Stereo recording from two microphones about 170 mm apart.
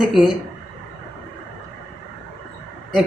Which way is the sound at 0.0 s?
Centre (ahead or behind).